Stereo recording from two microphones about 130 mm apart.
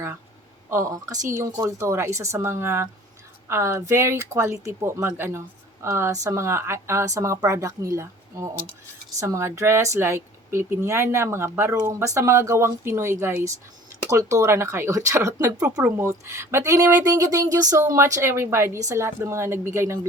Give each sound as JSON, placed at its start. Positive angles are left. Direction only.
{"t": 0.7, "sound": "speech", "side_deg": -25}